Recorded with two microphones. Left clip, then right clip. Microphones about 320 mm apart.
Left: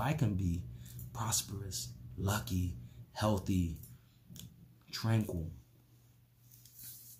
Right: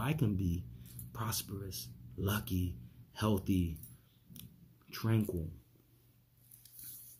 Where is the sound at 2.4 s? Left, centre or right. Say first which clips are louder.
Right 1 dB; left.